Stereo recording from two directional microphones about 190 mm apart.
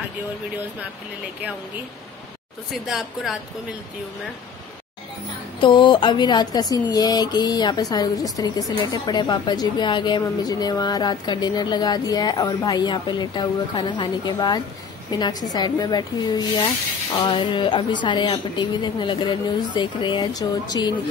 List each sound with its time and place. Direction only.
2.7 s speech: centre (ahead or behind)
5.6 s speech: 25° left (ahead or behind)